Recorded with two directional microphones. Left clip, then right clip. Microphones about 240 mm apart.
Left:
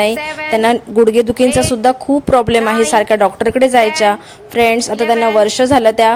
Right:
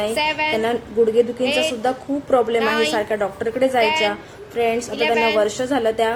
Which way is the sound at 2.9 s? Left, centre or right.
Left.